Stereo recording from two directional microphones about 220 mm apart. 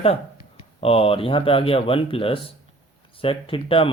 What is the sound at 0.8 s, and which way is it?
Speech, 25° left (ahead or behind).